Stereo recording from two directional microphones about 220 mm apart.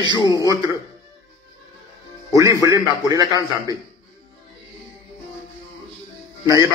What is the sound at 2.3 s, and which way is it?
A man's voice, 15° right (ahead or behind).